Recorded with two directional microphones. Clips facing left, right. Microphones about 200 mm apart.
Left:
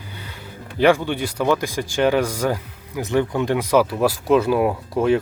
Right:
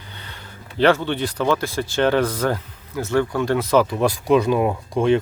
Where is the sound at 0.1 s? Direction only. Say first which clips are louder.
Left 2 dB; 10° left (ahead or behind).